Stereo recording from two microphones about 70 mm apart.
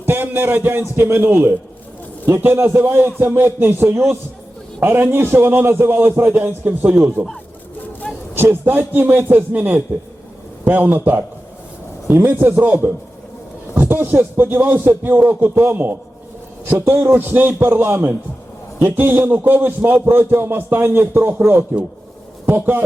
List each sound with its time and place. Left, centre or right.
0.0 s a man's voice: right
8.1 s a sound: centre
8.4 s a man's voice: right